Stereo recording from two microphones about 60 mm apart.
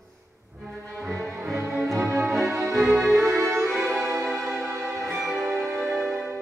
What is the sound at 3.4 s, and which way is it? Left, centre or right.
Music, right.